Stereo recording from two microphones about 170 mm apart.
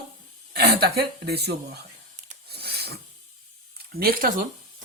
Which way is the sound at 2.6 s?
70° right (ahead or behind).